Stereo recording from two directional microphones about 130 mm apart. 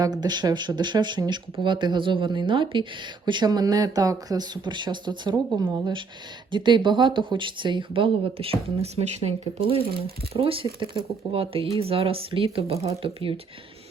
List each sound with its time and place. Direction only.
0.0 s speech: 30° right (ahead or behind)